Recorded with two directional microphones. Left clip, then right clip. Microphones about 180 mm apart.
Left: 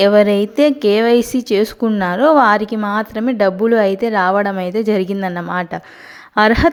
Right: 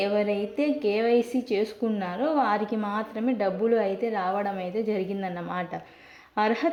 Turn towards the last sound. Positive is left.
turn(degrees=35)  # may be behind; listen again after turning